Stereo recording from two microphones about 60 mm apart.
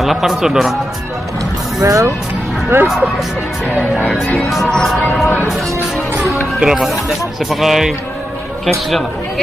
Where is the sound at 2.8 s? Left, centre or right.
Centre.